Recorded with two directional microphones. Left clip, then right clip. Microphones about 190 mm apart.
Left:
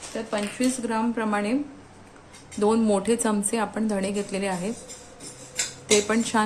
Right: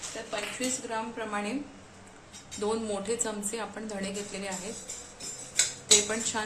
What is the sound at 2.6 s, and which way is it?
Speech, 35° left (ahead or behind).